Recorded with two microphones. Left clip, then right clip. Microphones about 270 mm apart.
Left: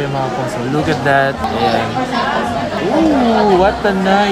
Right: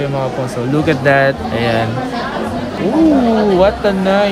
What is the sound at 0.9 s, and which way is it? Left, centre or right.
Speech, right.